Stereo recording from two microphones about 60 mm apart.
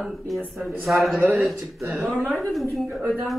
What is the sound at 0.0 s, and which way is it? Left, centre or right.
Speech, centre.